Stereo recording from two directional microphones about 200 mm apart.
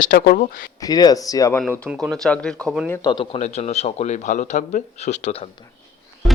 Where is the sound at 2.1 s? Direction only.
5° left (ahead or behind).